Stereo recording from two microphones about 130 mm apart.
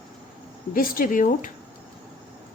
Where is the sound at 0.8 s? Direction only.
90° left.